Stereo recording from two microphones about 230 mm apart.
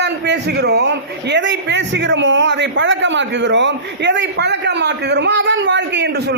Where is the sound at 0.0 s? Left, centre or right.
Right.